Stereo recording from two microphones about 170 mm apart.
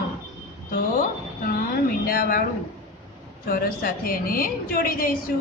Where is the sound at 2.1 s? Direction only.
60° left (ahead or behind).